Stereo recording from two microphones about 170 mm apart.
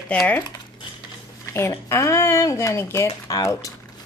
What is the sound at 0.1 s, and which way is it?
Speech, 10° left (ahead or behind).